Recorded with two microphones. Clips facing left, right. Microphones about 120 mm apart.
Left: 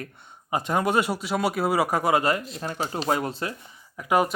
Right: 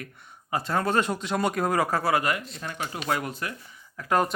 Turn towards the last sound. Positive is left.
turn(degrees=10)  # may be behind; listen again after turning